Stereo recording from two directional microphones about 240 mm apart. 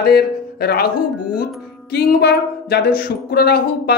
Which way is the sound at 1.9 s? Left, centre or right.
Left.